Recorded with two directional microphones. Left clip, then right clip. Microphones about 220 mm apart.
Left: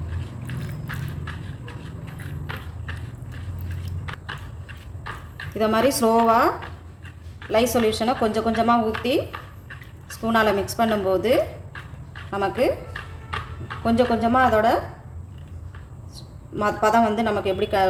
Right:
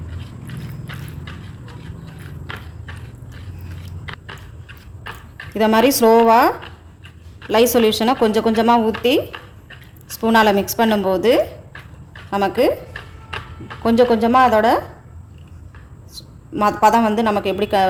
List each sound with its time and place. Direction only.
5.5 s a woman's voice: 50° right (ahead or behind)
7.5 s a woman's voice: 50° right (ahead or behind)
10.1 s a woman's voice: 50° right (ahead or behind)
13.8 s a woman's voice: 50° right (ahead or behind)
16.6 s a woman's voice: 50° right (ahead or behind)